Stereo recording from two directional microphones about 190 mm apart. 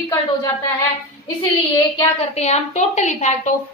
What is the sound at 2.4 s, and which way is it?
A woman's voice, 35° left (ahead or behind).